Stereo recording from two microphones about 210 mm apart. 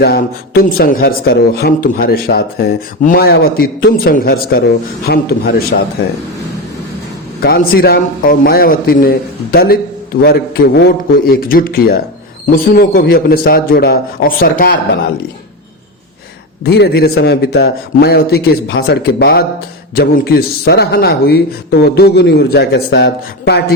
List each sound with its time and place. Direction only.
0.0 s a man's voice: 45° left (ahead or behind)
7.4 s a man's voice: 45° left (ahead or behind)
10.8 s a man's voice: 45° left (ahead or behind)
16.6 s a man's voice: 50° left (ahead or behind)